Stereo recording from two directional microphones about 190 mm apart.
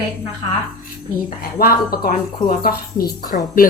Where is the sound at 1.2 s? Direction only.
50° left (ahead or behind).